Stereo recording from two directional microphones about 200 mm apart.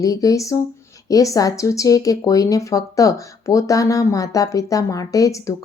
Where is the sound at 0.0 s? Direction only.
15° left (ahead or behind).